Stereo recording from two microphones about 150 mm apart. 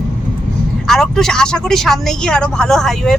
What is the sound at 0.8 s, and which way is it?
Speech, centre (ahead or behind).